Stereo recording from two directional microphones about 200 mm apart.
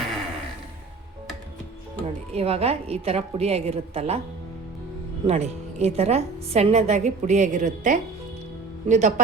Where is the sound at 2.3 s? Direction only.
30° right (ahead or behind).